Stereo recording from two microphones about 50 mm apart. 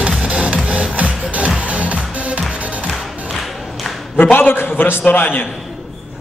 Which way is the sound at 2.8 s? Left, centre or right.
Centre.